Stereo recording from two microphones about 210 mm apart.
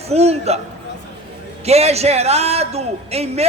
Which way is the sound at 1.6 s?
30° right (ahead or behind).